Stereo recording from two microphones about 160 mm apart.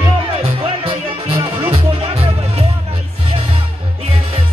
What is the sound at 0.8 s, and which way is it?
Music, 35° right (ahead or behind).